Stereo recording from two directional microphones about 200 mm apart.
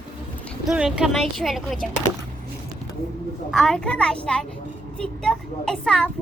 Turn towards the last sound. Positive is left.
turn(degrees=5)  # may be behind; listen again after turning